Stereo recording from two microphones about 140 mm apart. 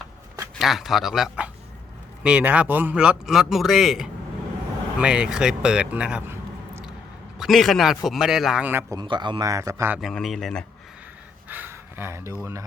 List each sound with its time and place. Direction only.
0.6 s a man's voice: centre (ahead or behind)
7.3 s a man's voice: centre (ahead or behind)
8.9 s a man's voice: 30° right (ahead or behind)
10.0 s a man's voice: centre (ahead or behind)
11.4 s speech: 15° right (ahead or behind)